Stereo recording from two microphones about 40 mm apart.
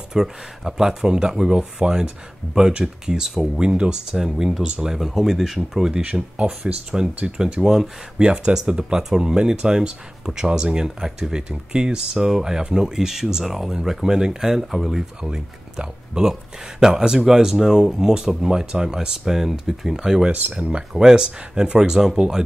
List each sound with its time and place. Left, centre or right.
0.1 s speech: centre
8.2 s speech: right
8.5 s speech: centre
20.2 s speech: right
20.6 s speech: centre